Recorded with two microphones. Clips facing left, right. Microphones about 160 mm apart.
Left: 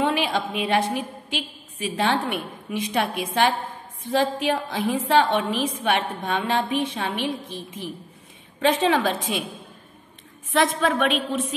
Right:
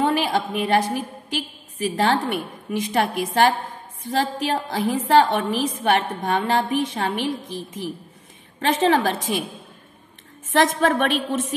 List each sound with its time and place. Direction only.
0.0 s a woman's voice: 45° right (ahead or behind)
10.5 s a woman's voice: 45° right (ahead or behind)